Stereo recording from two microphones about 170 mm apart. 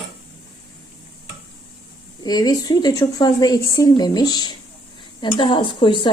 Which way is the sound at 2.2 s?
20° left (ahead or behind).